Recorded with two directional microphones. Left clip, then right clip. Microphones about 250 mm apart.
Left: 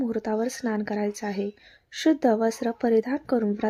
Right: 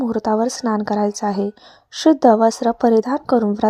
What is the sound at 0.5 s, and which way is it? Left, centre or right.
Speech, centre.